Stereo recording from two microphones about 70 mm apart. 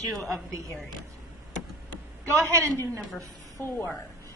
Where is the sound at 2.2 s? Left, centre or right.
Right.